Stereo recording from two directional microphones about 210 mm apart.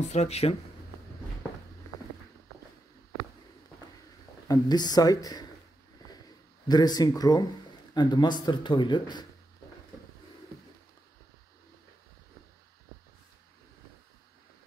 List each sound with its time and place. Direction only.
0.0 s speech: 30° left (ahead or behind)
4.5 s speech: 20° left (ahead or behind)
6.0 s a sound: 20° left (ahead or behind)
6.7 s speech: 20° left (ahead or behind)